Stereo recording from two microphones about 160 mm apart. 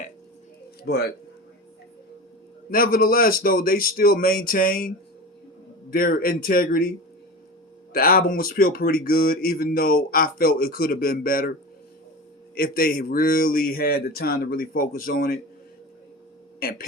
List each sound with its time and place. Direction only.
0.9 s speech: 80° left
2.6 s speech: 60° left (ahead or behind)
7.9 s speech: 65° left (ahead or behind)
12.5 s speech: 65° left (ahead or behind)
16.6 s speech: 70° left (ahead or behind)